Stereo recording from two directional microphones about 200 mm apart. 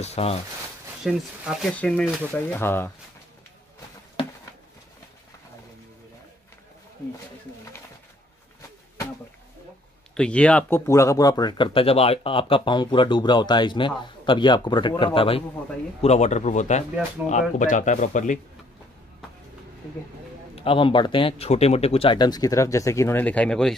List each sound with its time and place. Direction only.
0.0 s speech: 30° left (ahead or behind)
1.0 s speech: centre (ahead or behind)
10.1 s speech: 5° left (ahead or behind); by 18.4 s 40° left (ahead or behind)
20.5 s speech: 25° left (ahead or behind); by 23.7 s 5° left (ahead or behind)